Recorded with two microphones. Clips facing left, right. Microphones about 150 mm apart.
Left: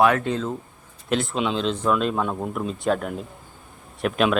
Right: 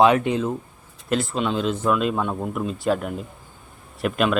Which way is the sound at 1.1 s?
Centre (ahead or behind).